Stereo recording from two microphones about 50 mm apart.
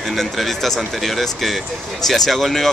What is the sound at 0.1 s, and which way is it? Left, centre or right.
Speech, centre.